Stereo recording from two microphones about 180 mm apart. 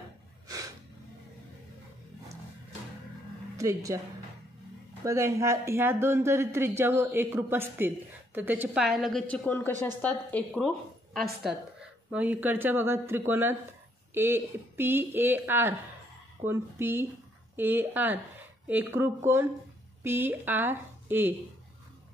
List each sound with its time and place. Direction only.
3.5 s a woman's voice: 15° right (ahead or behind)
5.0 s a man's voice: 15° right (ahead or behind); by 10.7 s 5° left (ahead or behind)
12.1 s a man's voice: 10° right (ahead or behind)